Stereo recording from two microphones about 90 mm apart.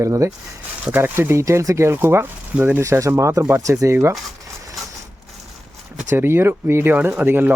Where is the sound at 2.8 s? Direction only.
35° right (ahead or behind).